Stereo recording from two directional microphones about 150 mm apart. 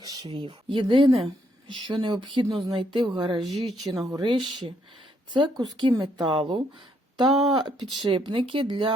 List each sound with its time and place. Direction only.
0.0 s speech: 25° right (ahead or behind)